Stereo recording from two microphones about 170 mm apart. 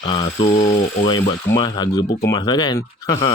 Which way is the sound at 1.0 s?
30° left (ahead or behind).